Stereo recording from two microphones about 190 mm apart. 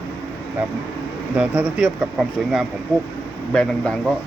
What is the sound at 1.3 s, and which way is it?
Speech, 5° right (ahead or behind).